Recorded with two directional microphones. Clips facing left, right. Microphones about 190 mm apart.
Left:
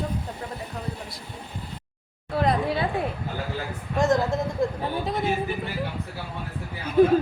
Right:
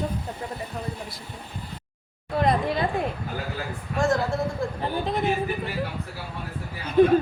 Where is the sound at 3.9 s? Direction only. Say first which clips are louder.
Left 2 dB; 20° left (ahead or behind).